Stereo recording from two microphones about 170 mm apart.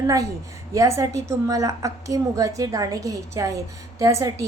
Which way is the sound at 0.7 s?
20° right (ahead or behind).